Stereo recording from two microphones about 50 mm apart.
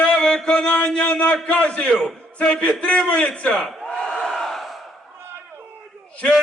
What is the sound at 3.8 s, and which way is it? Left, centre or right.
Crowd, centre.